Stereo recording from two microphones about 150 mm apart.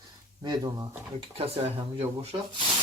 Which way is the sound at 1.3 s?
40° right (ahead or behind).